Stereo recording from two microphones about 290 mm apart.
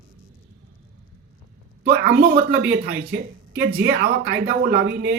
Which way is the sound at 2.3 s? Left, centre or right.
Right.